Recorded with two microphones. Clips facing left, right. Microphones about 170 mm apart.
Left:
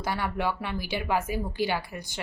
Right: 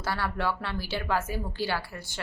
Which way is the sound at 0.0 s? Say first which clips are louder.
Left 1 dB; 15° left (ahead or behind).